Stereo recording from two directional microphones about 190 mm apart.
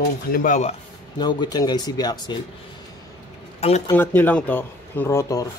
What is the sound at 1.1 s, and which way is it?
Speech, 20° left (ahead or behind).